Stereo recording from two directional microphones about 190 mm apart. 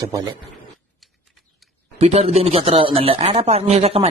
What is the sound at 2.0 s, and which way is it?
Speech, 35° right (ahead or behind).